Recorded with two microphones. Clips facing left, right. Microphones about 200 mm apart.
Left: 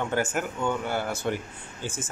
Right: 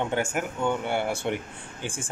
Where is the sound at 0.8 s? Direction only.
25° right (ahead or behind).